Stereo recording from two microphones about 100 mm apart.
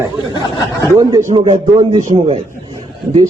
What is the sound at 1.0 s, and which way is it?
Speech, 35° right (ahead or behind).